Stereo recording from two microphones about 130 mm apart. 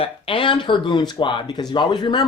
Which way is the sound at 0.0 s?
40° left (ahead or behind).